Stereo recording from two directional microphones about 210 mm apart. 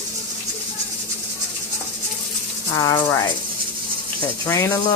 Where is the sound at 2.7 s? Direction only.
20° left (ahead or behind).